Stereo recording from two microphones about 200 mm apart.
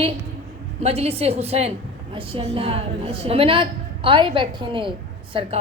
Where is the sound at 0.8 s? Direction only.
30° right (ahead or behind).